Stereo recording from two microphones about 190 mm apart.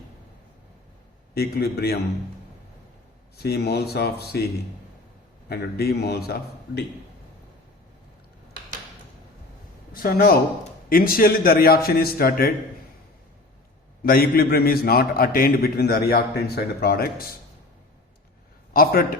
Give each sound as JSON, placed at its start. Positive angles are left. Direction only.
{"t": 1.3, "sound": "a man's voice", "side_deg": 55}
{"t": 3.3, "sound": "a man's voice", "side_deg": 55}
{"t": 9.9, "sound": "a man's voice", "side_deg": 50}
{"t": 14.0, "sound": "a man's voice", "side_deg": 50}
{"t": 18.7, "sound": "a man's voice", "side_deg": 50}